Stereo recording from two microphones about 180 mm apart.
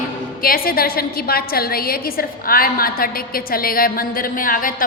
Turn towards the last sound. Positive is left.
turn(degrees=50)  # may be behind; listen again after turning